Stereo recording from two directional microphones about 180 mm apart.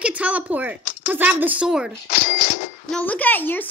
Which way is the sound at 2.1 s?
45° left (ahead or behind).